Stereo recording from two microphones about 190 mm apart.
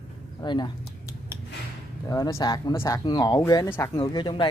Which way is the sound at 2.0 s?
15° left (ahead or behind).